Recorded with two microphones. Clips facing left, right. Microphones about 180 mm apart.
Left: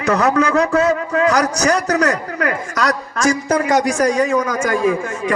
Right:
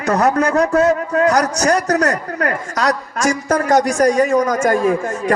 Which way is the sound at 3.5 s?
40° right (ahead or behind).